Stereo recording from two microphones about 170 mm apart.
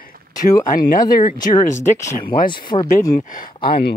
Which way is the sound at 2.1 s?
55° left (ahead or behind).